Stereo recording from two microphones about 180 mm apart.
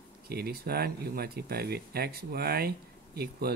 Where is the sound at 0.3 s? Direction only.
60° right (ahead or behind).